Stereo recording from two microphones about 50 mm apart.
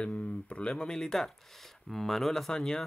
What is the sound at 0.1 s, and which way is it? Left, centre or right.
Speech, left.